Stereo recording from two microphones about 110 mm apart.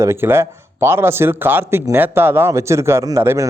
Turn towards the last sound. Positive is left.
turn(degrees=-25)  # may be behind; listen again after turning